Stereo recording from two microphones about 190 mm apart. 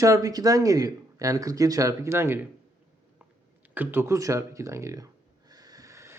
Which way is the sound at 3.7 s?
10° right (ahead or behind).